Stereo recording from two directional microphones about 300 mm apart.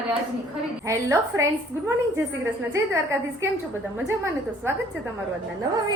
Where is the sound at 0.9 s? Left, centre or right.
Centre.